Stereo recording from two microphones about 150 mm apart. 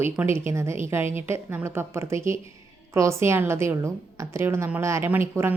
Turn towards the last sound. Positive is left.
turn(degrees=-15)  # may be behind; listen again after turning